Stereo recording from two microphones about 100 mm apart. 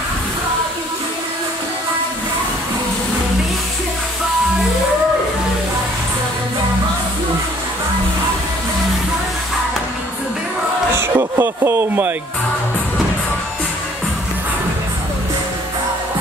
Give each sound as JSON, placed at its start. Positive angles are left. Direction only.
{"t": 11.0, "sound": "speech", "side_deg": -25}